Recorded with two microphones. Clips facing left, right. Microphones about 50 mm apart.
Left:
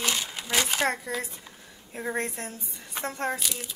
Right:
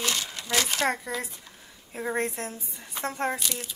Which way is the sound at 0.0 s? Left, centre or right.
Centre.